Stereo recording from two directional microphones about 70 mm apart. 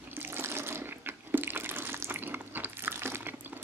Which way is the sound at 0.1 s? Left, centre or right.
Right.